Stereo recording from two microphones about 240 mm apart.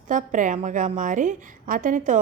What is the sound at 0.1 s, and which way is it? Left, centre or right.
A woman's voice, right.